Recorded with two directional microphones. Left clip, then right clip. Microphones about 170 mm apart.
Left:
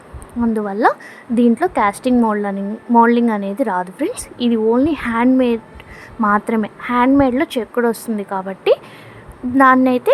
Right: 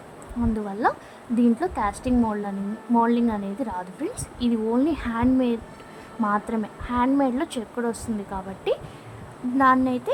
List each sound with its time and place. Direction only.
0.5 s a woman's voice: 25° left (ahead or behind)